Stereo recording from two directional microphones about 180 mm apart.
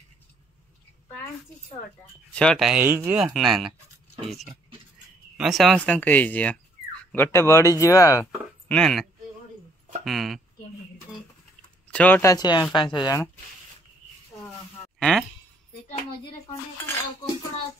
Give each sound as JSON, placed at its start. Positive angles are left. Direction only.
{"t": 2.3, "sound": "speech", "side_deg": 5}
{"t": 8.3, "sound": "speech", "side_deg": 5}
{"t": 10.0, "sound": "speech", "side_deg": 0}
{"t": 11.9, "sound": "speech", "side_deg": 10}
{"t": 15.0, "sound": "a sound", "side_deg": 0}